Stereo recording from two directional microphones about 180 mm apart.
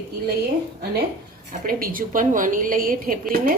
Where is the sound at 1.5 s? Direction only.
50° right (ahead or behind).